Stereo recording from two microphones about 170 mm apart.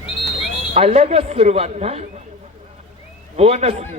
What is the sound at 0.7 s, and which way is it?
Speech, 40° right (ahead or behind).